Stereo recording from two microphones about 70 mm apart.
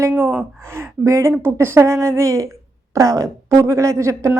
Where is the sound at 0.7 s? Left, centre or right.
Right.